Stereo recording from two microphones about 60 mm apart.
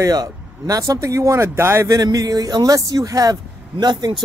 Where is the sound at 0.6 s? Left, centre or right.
Right.